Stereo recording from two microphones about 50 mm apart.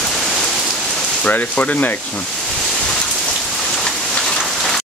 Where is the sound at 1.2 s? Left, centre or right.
Left.